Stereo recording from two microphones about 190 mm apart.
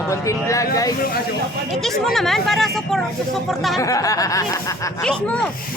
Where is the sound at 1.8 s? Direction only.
Centre (ahead or behind).